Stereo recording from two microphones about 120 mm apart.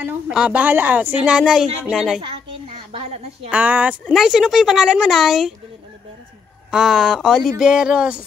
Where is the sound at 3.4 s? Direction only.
10° right (ahead or behind).